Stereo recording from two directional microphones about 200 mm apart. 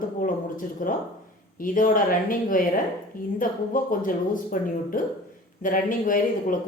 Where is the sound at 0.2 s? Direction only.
40° left (ahead or behind).